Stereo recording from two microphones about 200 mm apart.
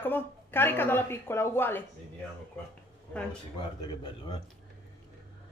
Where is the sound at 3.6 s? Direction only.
20° left (ahead or behind).